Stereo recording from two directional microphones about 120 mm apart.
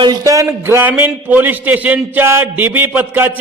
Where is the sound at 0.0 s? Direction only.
30° right (ahead or behind).